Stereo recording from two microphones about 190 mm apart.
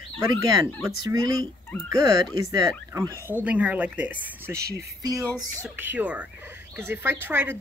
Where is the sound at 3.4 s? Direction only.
5° right (ahead or behind).